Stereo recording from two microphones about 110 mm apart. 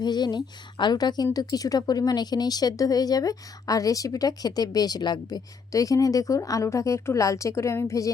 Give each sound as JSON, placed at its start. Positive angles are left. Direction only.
{"t": 0.0, "sound": "a woman's voice", "side_deg": 40}